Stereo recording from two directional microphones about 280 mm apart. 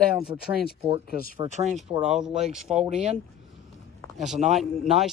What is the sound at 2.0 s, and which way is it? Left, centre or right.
Speech, centre.